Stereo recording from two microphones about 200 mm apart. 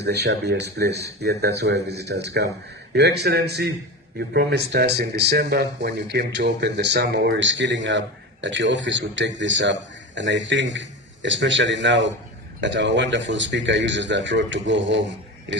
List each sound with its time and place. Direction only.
0.0 s speech: 55° right (ahead or behind)